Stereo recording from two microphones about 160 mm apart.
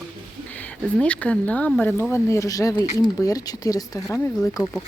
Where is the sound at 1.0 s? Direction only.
10° left (ahead or behind).